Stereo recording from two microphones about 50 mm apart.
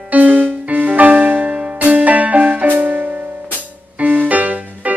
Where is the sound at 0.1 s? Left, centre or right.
Right.